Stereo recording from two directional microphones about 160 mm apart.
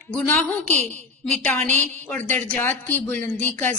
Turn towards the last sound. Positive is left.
turn(degrees=10)  # may be behind; listen again after turning